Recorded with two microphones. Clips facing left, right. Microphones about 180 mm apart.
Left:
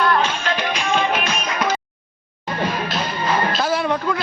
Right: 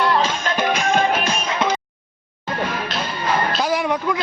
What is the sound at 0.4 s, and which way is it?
Music, 45° right (ahead or behind).